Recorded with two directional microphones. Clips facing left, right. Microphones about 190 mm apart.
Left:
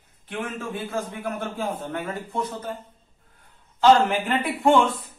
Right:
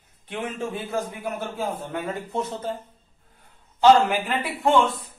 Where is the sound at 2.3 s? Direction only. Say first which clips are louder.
Right 1 dB; 25° right (ahead or behind).